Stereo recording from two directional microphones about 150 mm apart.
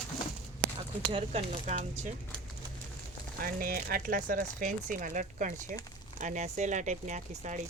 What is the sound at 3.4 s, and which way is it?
Speech, 75° right (ahead or behind).